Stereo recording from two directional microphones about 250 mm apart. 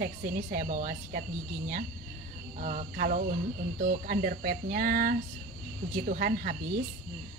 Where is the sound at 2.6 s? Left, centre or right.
Right.